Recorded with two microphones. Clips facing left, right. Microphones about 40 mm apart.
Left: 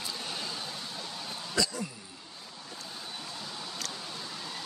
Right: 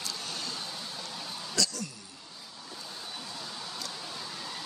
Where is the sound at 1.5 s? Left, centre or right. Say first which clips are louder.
Left 2 dB; centre.